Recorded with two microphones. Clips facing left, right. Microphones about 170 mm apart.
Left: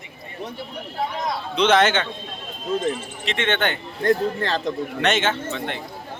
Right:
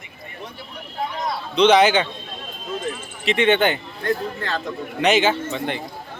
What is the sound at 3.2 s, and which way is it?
Speech, centre (ahead or behind).